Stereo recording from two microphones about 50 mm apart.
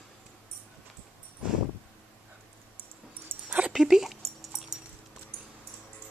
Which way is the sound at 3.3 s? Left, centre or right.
Right.